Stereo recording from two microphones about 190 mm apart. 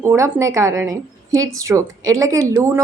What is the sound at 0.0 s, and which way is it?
A woman's voice, 15° right (ahead or behind).